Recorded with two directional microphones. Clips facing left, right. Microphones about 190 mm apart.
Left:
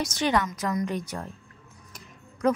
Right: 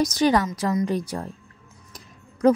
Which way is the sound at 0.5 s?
25° right (ahead or behind).